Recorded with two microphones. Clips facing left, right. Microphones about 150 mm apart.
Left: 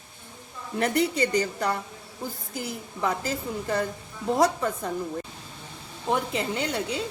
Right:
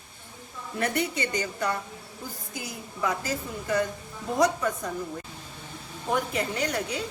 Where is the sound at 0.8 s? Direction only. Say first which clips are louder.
Left 4 dB; 30° left (ahead or behind).